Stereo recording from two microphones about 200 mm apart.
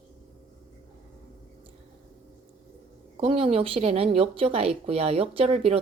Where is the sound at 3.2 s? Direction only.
30° right (ahead or behind).